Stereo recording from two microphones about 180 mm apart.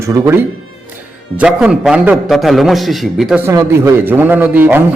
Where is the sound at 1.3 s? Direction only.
5° right (ahead or behind).